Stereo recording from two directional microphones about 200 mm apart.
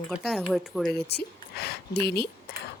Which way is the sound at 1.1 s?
55° left (ahead or behind).